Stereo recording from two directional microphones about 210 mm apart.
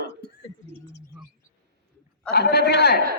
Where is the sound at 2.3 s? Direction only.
50° left (ahead or behind).